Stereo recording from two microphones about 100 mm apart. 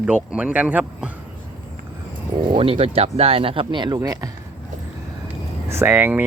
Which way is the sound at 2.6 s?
70° right (ahead or behind).